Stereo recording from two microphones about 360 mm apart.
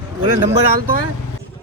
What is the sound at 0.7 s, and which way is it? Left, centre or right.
Speech, right.